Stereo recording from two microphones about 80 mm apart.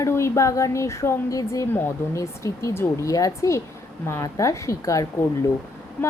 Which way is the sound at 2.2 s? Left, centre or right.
Left.